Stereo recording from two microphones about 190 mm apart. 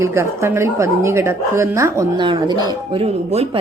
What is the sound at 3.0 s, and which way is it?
Speech, 35° right (ahead or behind).